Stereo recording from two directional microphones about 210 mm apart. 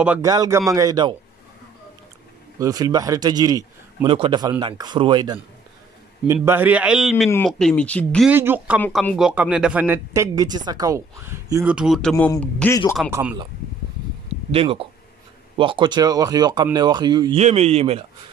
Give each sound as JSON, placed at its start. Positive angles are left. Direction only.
{"t": 0.0, "sound": "speech", "side_deg": -5}
{"t": 2.6, "sound": "a man's voice", "side_deg": -15}
{"t": 8.3, "sound": "speech", "side_deg": -10}
{"t": 8.8, "sound": "speech", "side_deg": 5}
{"t": 13.1, "sound": "speech", "side_deg": -5}
{"t": 14.5, "sound": "a man's voice", "side_deg": -25}
{"t": 17.4, "sound": "a man's voice", "side_deg": -30}